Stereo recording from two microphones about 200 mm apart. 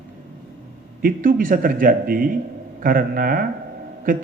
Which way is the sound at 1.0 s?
45° right (ahead or behind).